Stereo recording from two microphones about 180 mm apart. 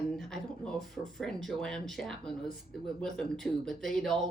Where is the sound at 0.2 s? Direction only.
5° left (ahead or behind).